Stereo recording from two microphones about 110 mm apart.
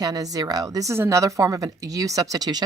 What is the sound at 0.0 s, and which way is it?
A woman's voice, 35° right (ahead or behind).